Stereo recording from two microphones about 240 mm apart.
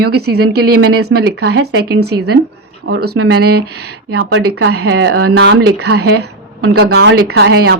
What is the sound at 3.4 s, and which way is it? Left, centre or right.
A woman's voice, right.